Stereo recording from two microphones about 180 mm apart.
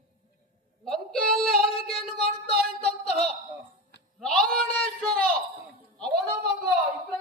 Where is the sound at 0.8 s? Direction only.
5° left (ahead or behind).